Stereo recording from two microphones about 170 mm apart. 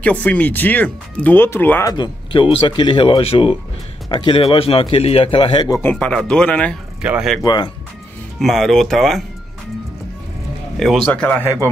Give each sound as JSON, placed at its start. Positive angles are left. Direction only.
{"t": 0.0, "sound": "speech", "side_deg": 10}
{"t": 2.0, "sound": "a man's voice", "side_deg": 30}
{"t": 5.8, "sound": "speech", "side_deg": 10}
{"t": 7.0, "sound": "speech", "side_deg": -5}
{"t": 7.4, "sound": "speech", "side_deg": 25}
{"t": 8.4, "sound": "speech", "side_deg": 0}
{"t": 10.8, "sound": "speech", "side_deg": 0}